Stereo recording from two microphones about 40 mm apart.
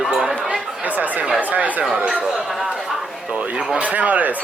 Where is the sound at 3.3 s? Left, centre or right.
Right.